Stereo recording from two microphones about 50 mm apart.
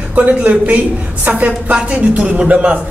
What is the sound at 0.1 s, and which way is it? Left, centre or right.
A man's voice, right.